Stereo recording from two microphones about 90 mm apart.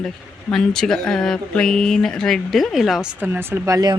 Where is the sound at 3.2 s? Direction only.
25° right (ahead or behind).